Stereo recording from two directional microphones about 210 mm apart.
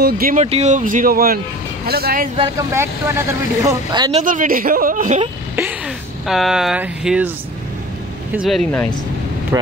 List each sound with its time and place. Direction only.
0.0 s speech: 40° right (ahead or behind)
2.5 s speech: 10° right (ahead or behind)
4.2 s speech: 40° right (ahead or behind)
6.2 s speech: centre (ahead or behind)
8.3 s speech: 5° right (ahead or behind)
9.5 s speech: 15° right (ahead or behind)